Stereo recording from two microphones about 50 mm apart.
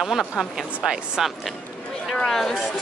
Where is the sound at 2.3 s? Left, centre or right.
Centre.